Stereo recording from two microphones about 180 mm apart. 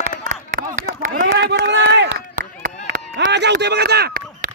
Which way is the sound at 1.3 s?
70° right (ahead or behind).